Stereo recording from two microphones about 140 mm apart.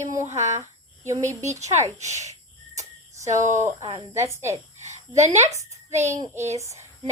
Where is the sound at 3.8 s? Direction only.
35° right (ahead or behind).